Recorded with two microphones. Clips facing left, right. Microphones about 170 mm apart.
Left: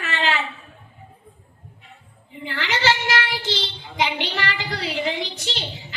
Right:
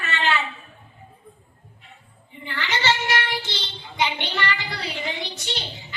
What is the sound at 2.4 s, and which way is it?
Child singing, 90° left.